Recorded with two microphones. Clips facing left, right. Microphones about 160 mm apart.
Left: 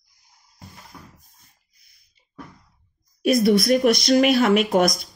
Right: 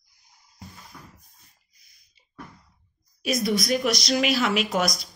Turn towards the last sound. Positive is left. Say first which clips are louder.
# left 7 dB
turn(degrees=55)  # may be behind; listen again after turning